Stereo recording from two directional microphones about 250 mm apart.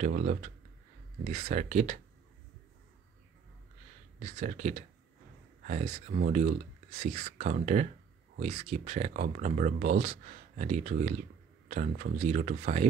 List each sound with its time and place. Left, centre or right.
0.0 s speech: right
4.2 s speech: right